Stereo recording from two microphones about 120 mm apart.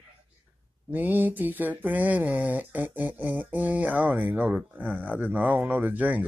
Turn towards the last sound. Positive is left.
turn(degrees=-15)  # may be behind; listen again after turning